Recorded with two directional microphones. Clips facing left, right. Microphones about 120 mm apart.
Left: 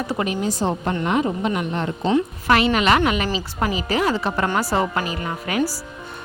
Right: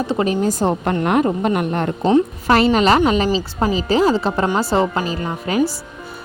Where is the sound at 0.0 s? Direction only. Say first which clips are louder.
Right 5 dB; 30° right (ahead or behind).